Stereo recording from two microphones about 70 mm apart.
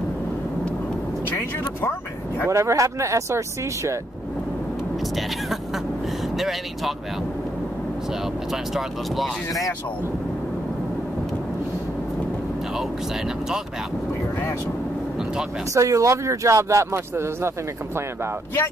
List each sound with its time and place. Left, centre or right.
1.8 s speech: left
2.5 s speech: right
6.3 s speech: centre
8.7 s speech: centre
15.7 s speech: right